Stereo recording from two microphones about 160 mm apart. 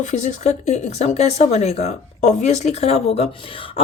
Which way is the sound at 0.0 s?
50° left (ahead or behind).